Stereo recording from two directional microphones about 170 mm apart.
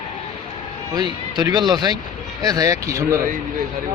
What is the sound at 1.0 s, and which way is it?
Speech, 25° right (ahead or behind).